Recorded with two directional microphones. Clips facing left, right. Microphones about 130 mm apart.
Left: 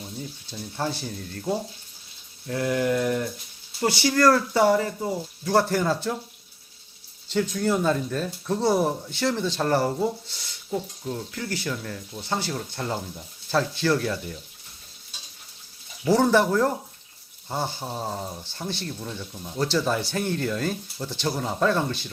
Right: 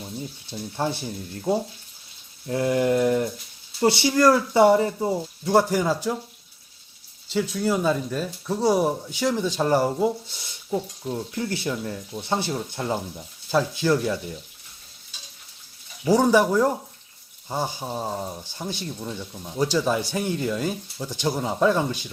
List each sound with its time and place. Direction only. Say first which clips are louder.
0.5 s speech: right 3 dB; 20° right (ahead or behind)
7.3 s speech: even; 5° right (ahead or behind)
16.0 s speech: right 1 dB; 15° right (ahead or behind)